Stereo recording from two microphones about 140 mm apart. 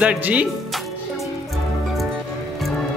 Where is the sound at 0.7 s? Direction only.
Centre (ahead or behind).